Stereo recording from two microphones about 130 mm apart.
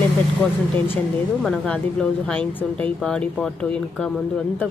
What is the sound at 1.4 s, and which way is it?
A woman's voice, 5° left (ahead or behind).